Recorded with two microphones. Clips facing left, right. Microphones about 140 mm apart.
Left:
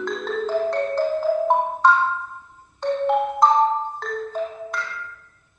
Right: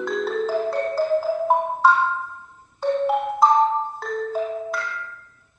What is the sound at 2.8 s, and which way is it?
Marimba, 5° right (ahead or behind).